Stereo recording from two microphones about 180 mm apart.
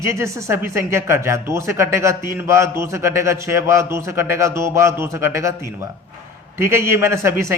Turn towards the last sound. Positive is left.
turn(degrees=-15)  # may be behind; listen again after turning